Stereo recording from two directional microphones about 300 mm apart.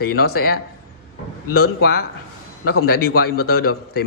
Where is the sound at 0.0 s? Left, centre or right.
Left.